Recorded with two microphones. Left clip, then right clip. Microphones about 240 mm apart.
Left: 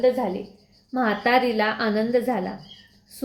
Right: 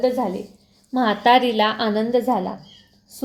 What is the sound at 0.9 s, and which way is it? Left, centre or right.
A woman's voice, centre.